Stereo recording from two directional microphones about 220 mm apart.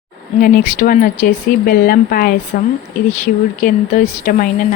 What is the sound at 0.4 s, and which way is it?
Speech, 40° left (ahead or behind).